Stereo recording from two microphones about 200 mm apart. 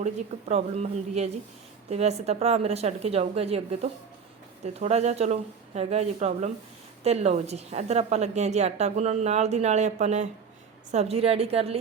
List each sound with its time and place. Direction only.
0.0 s a woman's voice: 35° right (ahead or behind)